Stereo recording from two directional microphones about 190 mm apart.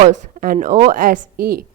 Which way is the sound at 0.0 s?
45° right (ahead or behind).